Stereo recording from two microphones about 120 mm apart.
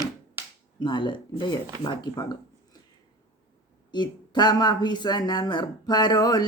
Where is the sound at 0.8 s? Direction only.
40° left (ahead or behind).